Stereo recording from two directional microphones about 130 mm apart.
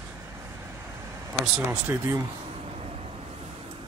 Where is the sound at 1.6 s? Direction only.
20° right (ahead or behind).